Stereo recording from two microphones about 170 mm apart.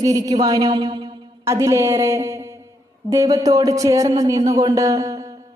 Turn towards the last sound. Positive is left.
turn(degrees=-20)  # may be behind; listen again after turning